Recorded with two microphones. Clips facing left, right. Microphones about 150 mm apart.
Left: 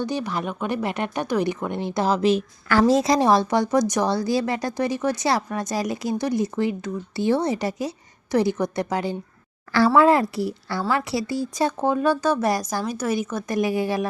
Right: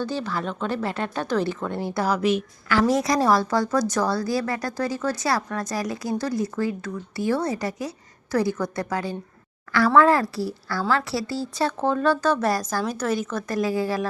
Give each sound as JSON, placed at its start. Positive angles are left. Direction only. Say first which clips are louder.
{"t": 0.0, "sound": "speech", "louder": "left 1 dB", "side_deg": 15}